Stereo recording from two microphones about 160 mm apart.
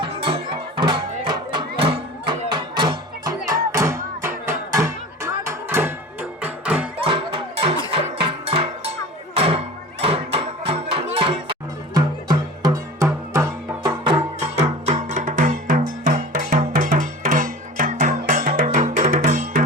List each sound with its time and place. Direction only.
0.0 s music: 35° right (ahead or behind); by 6.8 s 10° right (ahead or behind)
7.0 s cowbell: 35° right (ahead or behind)
11.9 s music: 25° right (ahead or behind)
14.8 s music: 50° right (ahead or behind)